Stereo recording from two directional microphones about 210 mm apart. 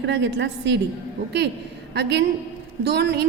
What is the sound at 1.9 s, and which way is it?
A woman's voice, 55° right (ahead or behind).